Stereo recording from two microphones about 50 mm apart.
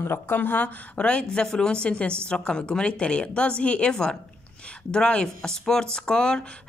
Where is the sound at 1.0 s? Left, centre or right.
Left.